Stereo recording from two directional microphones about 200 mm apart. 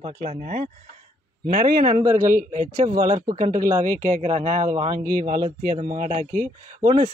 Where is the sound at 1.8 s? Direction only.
35° right (ahead or behind).